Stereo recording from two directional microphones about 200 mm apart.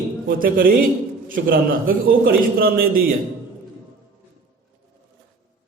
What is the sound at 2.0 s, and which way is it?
Speech, 45° right (ahead or behind).